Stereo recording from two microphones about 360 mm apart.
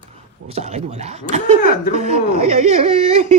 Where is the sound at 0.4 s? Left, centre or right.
Centre.